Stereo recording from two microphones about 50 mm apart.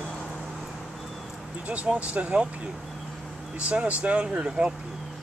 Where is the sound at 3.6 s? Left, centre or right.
Right.